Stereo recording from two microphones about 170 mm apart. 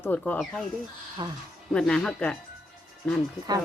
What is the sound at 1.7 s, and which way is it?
Speech, 5° left (ahead or behind).